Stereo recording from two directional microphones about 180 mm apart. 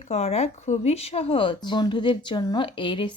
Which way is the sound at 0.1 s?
35° left (ahead or behind).